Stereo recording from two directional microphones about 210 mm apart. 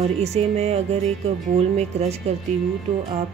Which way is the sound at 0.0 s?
30° right (ahead or behind).